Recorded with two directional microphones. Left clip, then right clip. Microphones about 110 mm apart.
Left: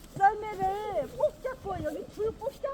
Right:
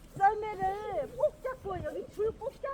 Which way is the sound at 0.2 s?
20° left (ahead or behind).